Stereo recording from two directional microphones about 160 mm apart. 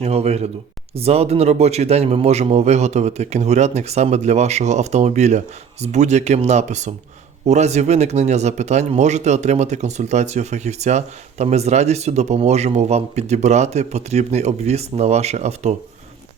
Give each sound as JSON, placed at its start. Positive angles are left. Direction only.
{"t": 0.0, "sound": "speech", "side_deg": -40}